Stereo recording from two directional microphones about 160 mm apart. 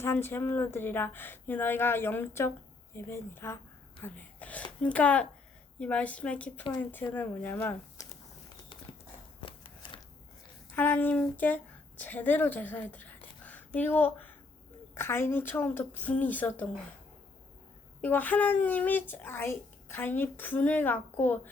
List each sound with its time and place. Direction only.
0.0 s speech: 15° left (ahead or behind)
9.4 s a sound: 35° left (ahead or behind)
10.8 s speech: 10° left (ahead or behind)
18.0 s speech: 10° left (ahead or behind)